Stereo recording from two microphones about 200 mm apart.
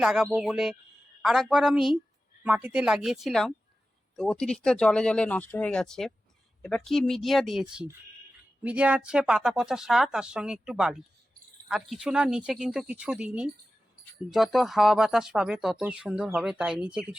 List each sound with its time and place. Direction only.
0.0 s speech: centre (ahead or behind)